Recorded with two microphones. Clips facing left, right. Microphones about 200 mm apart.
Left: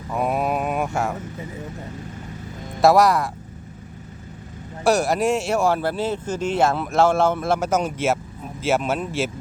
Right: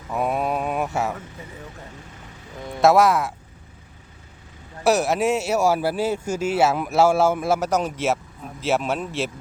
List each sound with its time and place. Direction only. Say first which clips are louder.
0.1 s mantra: left 1 dB; centre (ahead or behind)
2.8 s speech: left 1 dB; centre (ahead or behind)
4.8 s speech: even; centre (ahead or behind)